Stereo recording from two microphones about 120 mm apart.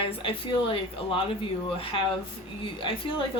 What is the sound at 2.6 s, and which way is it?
Speech, 45° left (ahead or behind).